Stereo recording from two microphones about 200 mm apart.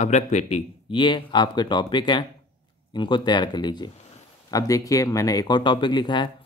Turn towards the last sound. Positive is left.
turn(degrees=20)  # may be behind; listen again after turning